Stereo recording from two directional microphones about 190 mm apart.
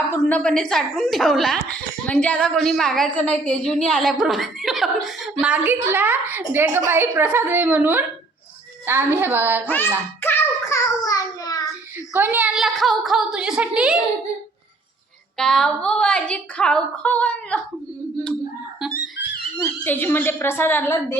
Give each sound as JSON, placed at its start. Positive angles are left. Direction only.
{"t": 0.1, "sound": "a woman's voice", "side_deg": 10}
{"t": 9.6, "sound": "speech", "side_deg": 10}
{"t": 10.2, "sound": "music", "side_deg": 10}
{"t": 12.1, "sound": "a woman's voice", "side_deg": -10}
{"t": 15.4, "sound": "a woman's voice", "side_deg": 5}
{"t": 19.5, "sound": "speech", "side_deg": 10}